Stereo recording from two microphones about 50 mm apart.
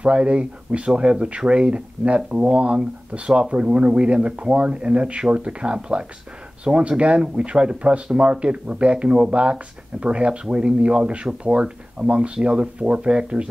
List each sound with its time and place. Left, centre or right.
0.0 s speech: right